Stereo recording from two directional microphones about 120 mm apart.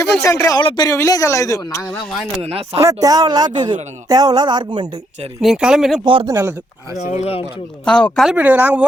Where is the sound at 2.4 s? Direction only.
55° right (ahead or behind).